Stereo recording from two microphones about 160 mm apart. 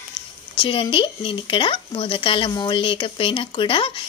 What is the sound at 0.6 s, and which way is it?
Speech, 35° left (ahead or behind).